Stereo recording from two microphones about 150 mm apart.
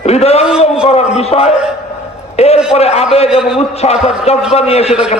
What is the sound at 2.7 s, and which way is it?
Speech, 45° left (ahead or behind).